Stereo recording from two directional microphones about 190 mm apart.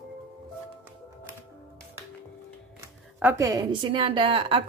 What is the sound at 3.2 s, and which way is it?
A woman's voice, 15° right (ahead or behind).